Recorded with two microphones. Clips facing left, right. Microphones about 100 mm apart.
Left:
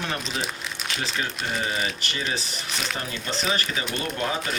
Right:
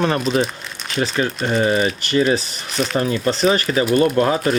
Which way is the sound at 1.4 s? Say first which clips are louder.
Right 12 dB; 50° right (ahead or behind).